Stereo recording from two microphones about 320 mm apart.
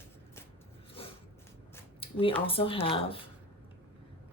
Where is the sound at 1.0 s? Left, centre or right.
Centre.